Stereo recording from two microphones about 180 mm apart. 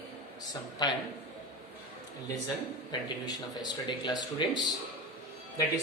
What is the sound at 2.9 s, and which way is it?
Speech, 20° left (ahead or behind).